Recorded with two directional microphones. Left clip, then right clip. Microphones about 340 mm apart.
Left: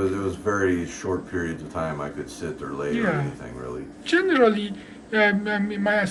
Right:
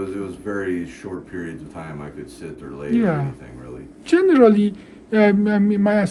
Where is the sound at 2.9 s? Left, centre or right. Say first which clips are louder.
Right 6 dB; centre.